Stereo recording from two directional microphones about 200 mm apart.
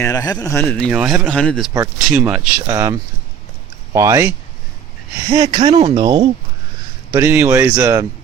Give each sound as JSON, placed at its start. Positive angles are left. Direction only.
{"t": 0.0, "sound": "speech", "side_deg": 20}
{"t": 7.1, "sound": "speech", "side_deg": -10}